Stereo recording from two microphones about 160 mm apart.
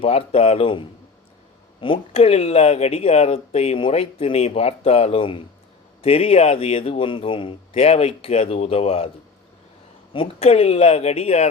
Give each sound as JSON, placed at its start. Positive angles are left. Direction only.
{"t": 0.0, "sound": "speech", "side_deg": 40}
{"t": 10.1, "sound": "speech", "side_deg": 35}